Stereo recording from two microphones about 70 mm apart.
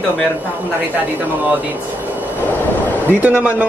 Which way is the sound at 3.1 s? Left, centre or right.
Right.